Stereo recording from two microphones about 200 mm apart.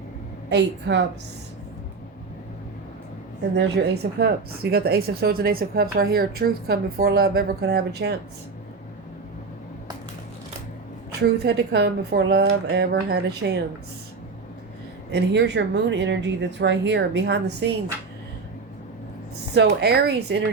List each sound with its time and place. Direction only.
0.5 s speech: 60° right (ahead or behind)
3.5 s speech: 55° right (ahead or behind)
11.2 s speech: 55° right (ahead or behind)
15.1 s speech: 60° right (ahead or behind)
19.5 s speech: 55° right (ahead or behind)